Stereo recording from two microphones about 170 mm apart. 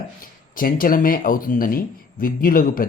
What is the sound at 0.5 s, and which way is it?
Speech, 55° left (ahead or behind).